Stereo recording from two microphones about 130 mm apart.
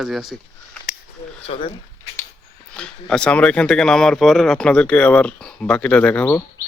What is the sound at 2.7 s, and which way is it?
Speech, 5° left (ahead or behind).